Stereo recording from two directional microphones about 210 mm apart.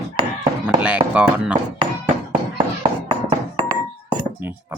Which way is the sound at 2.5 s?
25° right (ahead or behind).